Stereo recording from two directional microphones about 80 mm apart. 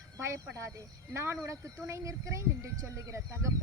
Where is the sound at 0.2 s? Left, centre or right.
Right.